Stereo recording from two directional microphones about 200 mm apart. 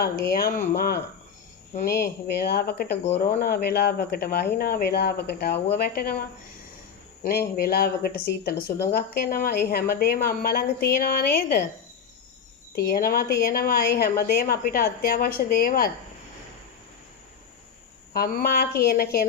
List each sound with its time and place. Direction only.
0.0 s a woman's voice: 50° left (ahead or behind)
2.3 s a woman's voice: 50° left (ahead or behind)
3.0 s a woman's voice: 40° left (ahead or behind)
12.7 s a woman's voice: 50° left (ahead or behind)
18.1 s a woman's voice: 50° left (ahead or behind)